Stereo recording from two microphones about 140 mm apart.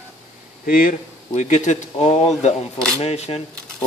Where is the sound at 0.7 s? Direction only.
85° left; by 3.4 s 45° left (ahead or behind).